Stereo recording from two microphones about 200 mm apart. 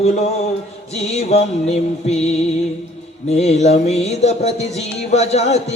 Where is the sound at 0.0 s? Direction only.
35° left (ahead or behind).